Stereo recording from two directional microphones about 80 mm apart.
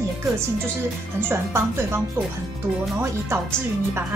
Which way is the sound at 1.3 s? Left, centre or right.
Right.